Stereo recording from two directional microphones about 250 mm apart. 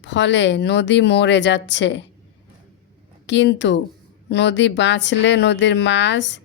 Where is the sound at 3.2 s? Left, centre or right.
Left.